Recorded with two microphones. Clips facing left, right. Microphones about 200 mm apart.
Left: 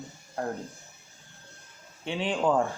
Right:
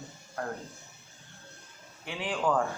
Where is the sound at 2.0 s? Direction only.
25° left (ahead or behind).